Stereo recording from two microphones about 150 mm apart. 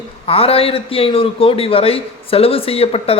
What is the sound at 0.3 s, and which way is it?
A man's voice, 40° left (ahead or behind).